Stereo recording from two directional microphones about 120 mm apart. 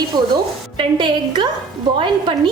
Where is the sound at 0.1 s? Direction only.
40° right (ahead or behind).